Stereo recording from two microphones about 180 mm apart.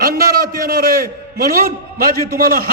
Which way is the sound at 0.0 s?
55° right (ahead or behind).